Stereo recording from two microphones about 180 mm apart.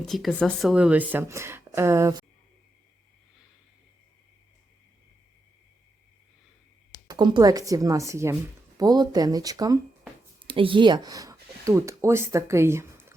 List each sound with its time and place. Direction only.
0.0 s speech: centre (ahead or behind); by 2.2 s 15° right (ahead or behind)
7.1 s speech: 25° right (ahead or behind)